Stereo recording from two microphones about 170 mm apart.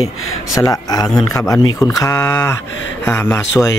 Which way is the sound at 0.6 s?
20° left (ahead or behind).